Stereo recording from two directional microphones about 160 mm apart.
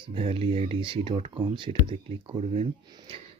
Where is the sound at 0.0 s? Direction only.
35° right (ahead or behind).